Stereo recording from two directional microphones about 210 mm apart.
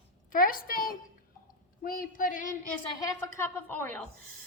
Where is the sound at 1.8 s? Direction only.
40° left (ahead or behind).